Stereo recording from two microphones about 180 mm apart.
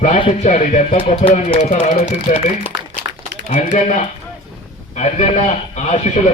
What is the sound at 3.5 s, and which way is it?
A man's voice, 45° left (ahead or behind).